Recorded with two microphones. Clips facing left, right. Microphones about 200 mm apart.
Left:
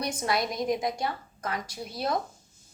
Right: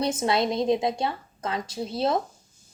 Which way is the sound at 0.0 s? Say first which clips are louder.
Right 5 dB; 25° right (ahead or behind).